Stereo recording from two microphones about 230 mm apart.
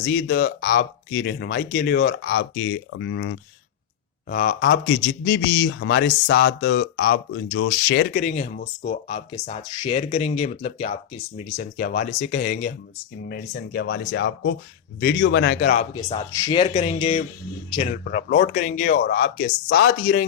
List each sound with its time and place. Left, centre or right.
0.0 s speech: left
5.0 s speech: left
8.1 s speech: left
9.0 s speech: left
11.5 s speech: left
15.8 s speech: left
18.0 s speech: left
19.6 s speech: left